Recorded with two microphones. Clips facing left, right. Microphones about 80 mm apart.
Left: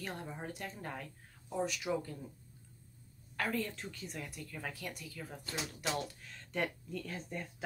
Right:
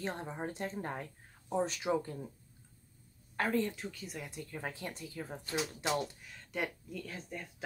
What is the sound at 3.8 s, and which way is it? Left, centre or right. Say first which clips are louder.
Speech: right 1 dB; centre.